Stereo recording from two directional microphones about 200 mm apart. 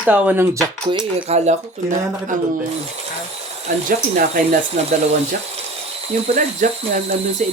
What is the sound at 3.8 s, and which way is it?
Speech, 40° right (ahead or behind).